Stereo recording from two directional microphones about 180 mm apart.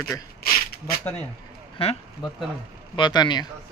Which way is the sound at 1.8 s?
30° left (ahead or behind).